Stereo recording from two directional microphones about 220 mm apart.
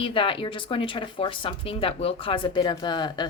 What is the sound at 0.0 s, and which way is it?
Speech, 25° left (ahead or behind).